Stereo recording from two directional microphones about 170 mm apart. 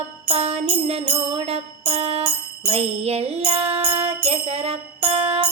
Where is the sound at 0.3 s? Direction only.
35° right (ahead or behind).